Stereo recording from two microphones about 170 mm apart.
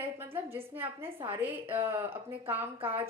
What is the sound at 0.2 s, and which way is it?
A woman's voice, 15° right (ahead or behind).